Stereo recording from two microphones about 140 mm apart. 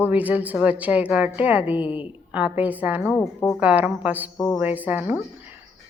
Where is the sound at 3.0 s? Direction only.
15° left (ahead or behind).